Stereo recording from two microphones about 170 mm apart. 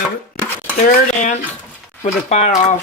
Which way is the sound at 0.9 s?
45° left (ahead or behind).